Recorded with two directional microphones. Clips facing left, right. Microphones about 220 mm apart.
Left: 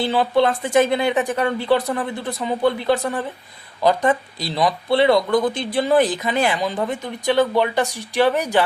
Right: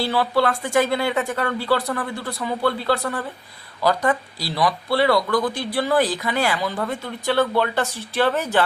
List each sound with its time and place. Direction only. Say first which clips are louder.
0.0 s speech: left 3 dB; 20° left (ahead or behind)